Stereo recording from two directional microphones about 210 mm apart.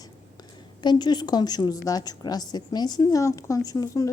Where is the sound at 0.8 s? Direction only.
20° left (ahead or behind).